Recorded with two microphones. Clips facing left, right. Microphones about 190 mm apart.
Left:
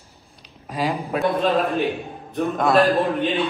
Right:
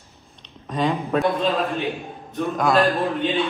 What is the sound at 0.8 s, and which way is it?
Speech, 35° left (ahead or behind).